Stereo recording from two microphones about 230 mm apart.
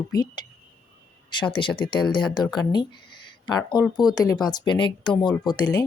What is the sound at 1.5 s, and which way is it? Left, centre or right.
Speech, left.